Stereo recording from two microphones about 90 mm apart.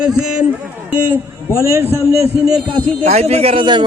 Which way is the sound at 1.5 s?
30° right (ahead or behind).